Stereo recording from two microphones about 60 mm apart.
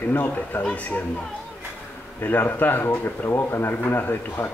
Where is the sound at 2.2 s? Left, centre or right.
Left.